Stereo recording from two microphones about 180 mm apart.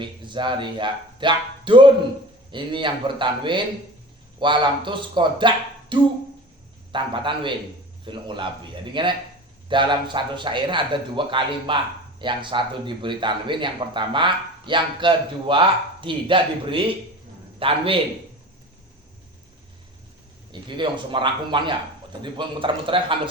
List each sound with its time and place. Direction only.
0.0 s a man's voice: 25° right (ahead or behind)
20.5 s a man's voice: 25° right (ahead or behind)